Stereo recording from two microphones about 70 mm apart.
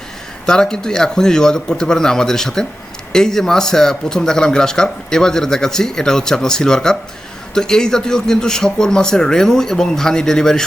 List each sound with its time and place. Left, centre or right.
0.4 s speech: centre